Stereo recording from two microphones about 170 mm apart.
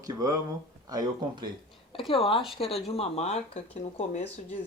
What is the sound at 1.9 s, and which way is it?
Speech, 30° left (ahead or behind).